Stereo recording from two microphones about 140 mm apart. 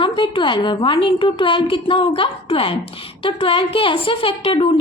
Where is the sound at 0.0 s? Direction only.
35° left (ahead or behind).